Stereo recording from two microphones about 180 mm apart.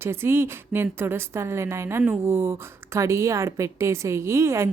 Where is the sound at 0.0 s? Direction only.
15° right (ahead or behind).